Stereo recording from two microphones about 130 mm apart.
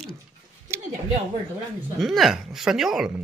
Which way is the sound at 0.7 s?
20° right (ahead or behind).